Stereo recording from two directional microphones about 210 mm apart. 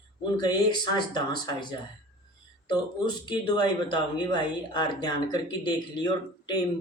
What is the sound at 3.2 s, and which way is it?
Speech, 20° left (ahead or behind).